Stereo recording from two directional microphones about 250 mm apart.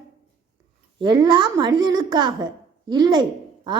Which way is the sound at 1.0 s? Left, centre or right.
Centre.